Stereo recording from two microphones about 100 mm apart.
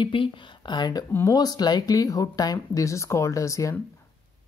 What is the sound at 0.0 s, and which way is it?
Speech, 55° left (ahead or behind).